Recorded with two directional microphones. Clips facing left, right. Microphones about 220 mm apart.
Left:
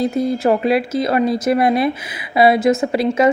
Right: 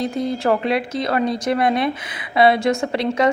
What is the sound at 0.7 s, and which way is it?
Speech, 25° left (ahead or behind).